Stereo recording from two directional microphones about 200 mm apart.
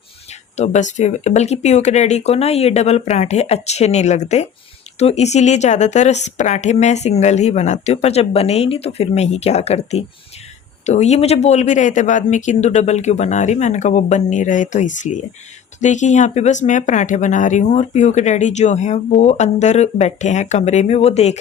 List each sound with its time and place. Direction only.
0.5 s speech: 35° left (ahead or behind)